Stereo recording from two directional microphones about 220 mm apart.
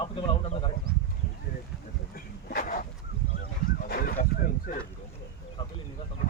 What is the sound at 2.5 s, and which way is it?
Dog, 40° left (ahead or behind).